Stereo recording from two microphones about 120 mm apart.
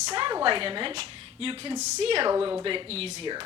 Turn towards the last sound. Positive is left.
turn(degrees=-55)  # may be behind; listen again after turning